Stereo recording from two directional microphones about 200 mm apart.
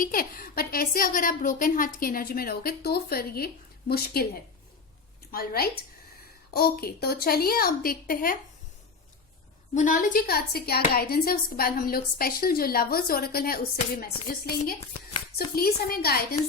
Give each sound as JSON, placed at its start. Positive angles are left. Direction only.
{"t": 0.0, "sound": "a woman's voice", "side_deg": 45}
{"t": 5.3, "sound": "a woman's voice", "side_deg": 50}
{"t": 9.7, "sound": "a woman's voice", "side_deg": 40}